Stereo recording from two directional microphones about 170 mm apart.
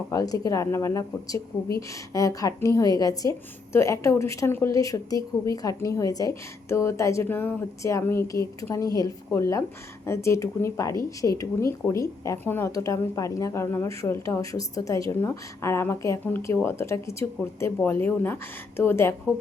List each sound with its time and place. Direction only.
0.1 s a woman's voice: 20° left (ahead or behind)